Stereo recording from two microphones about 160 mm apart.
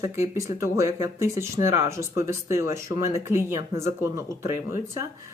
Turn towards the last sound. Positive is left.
turn(degrees=-15)  # may be behind; listen again after turning